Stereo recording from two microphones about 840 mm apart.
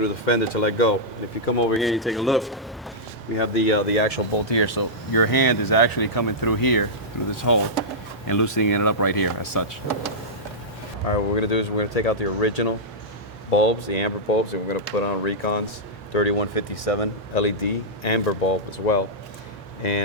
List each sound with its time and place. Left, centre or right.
0.0 s speech: left
1.8 s a man's voice: centre
3.3 s speech: left
4.4 s speech: left
11.1 s speech: left